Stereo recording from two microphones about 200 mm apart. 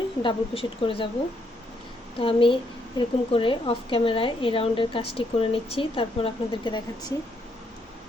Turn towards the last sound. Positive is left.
turn(degrees=20)  # may be behind; listen again after turning